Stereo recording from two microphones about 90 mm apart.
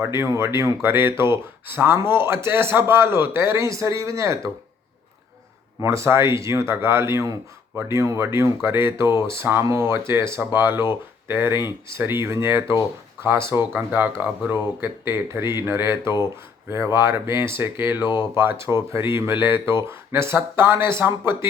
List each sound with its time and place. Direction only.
0.0 s speech: 30° right (ahead or behind)
5.8 s speech: 30° right (ahead or behind)
18.0 s speech: 55° left (ahead or behind)
18.3 s speech: 30° right (ahead or behind)